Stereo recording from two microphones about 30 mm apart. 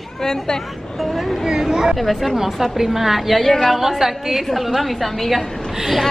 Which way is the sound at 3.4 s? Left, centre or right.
Centre.